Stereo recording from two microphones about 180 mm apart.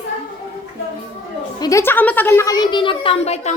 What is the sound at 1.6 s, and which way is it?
A woman's voice, 15° left (ahead or behind).